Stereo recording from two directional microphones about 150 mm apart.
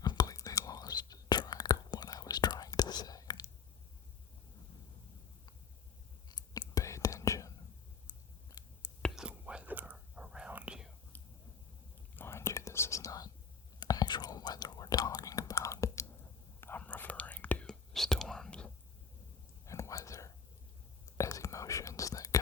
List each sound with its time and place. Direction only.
0.0 s whispering: 25° left (ahead or behind)
6.2 s whispering: 25° left (ahead or behind)
8.6 s whispering: 25° left (ahead or behind)
9.0 s whispering: 5° left (ahead or behind)
9.2 s whispering: 10° right (ahead or behind)
12.1 s whispering: 15° left (ahead or behind)
19.6 s whispering: 20° left (ahead or behind)